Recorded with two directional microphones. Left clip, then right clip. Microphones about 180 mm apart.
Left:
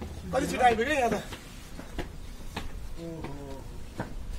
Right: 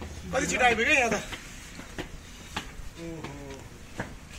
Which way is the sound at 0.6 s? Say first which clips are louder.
Right 1 dB; 35° left (ahead or behind).